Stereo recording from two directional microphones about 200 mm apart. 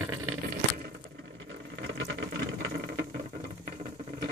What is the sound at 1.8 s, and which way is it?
Water, 60° right (ahead or behind).